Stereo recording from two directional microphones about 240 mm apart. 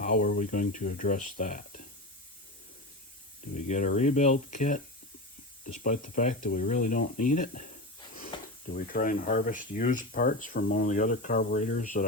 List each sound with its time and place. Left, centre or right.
0.0 s speech: left
3.5 s speech: left
8.7 s speech: left